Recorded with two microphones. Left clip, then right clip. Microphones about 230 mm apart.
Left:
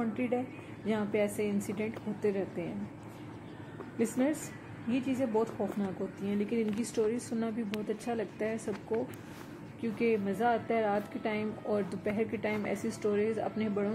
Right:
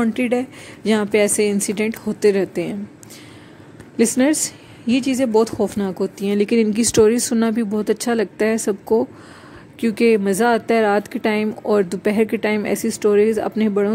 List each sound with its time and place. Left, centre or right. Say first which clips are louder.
0.0 s speech: right 13 dB; right
4.0 s speech: right 15 dB; right
9.8 s speech: right 15 dB; right